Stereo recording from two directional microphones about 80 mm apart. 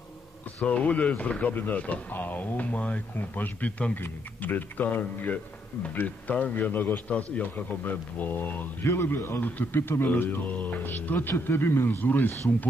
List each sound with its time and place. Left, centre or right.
0.6 s a man's voice: centre